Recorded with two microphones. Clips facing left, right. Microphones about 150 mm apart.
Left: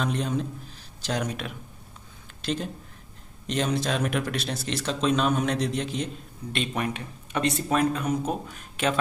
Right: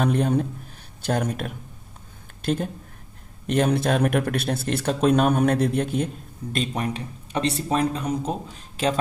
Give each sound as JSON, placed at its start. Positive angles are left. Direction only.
{"t": 0.0, "sound": "speech", "side_deg": -55}
{"t": 6.5, "sound": "speech", "side_deg": -35}